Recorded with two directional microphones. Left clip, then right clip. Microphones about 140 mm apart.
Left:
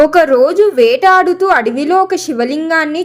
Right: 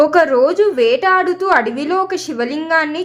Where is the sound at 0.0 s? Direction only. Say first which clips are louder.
Left 3 dB; 30° left (ahead or behind).